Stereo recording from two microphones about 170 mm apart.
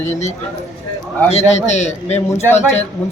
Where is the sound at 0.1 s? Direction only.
40° left (ahead or behind).